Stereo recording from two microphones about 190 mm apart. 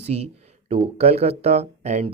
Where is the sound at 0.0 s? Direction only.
35° right (ahead or behind).